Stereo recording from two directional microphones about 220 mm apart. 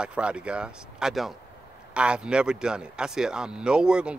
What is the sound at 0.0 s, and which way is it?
Speech, 5° right (ahead or behind).